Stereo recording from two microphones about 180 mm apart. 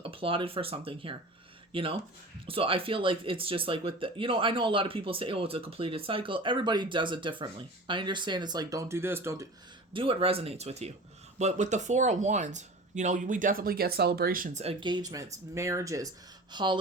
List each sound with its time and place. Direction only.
0.0 s speech: 30° right (ahead or behind); by 9.5 s 15° right (ahead or behind)
9.9 s speech: 30° right (ahead or behind); by 14.6 s 50° right (ahead or behind)
14.6 s speech: 30° right (ahead or behind)